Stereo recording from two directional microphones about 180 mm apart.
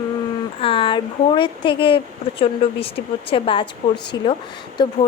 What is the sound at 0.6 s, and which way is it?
A woman's voice, 30° left (ahead or behind).